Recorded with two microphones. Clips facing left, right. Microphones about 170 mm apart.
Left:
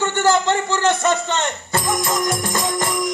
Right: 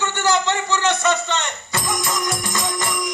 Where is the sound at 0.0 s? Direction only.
50° left (ahead or behind).